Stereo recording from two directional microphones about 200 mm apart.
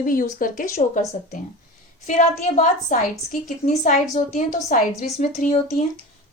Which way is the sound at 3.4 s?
35° left (ahead or behind).